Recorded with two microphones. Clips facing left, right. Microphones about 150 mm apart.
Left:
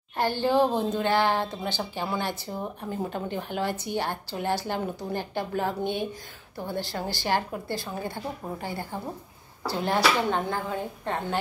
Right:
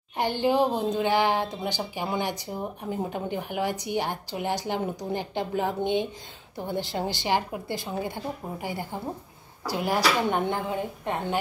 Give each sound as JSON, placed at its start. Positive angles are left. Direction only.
{"t": 0.2, "sound": "speech", "side_deg": -15}